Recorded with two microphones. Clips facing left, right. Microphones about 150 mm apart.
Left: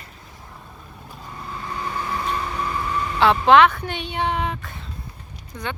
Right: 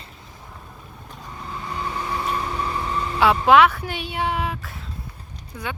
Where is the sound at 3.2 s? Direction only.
10° right (ahead or behind).